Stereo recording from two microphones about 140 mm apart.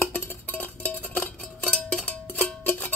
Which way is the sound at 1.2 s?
10° left (ahead or behind).